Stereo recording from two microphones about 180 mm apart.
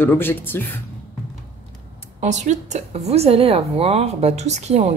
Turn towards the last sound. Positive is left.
turn(degrees=-35)  # may be behind; listen again after turning